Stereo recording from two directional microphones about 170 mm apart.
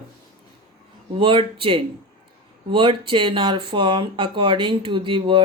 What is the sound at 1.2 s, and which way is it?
Speech, 30° right (ahead or behind).